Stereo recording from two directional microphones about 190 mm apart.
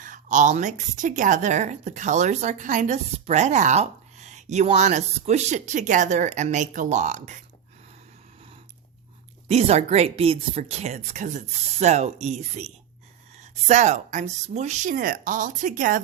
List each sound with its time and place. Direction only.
0.0 s a woman's voice: 40° right (ahead or behind)
9.5 s a woman's voice: 35° right (ahead or behind)